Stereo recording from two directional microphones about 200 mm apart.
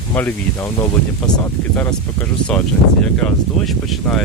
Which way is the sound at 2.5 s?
5° left (ahead or behind).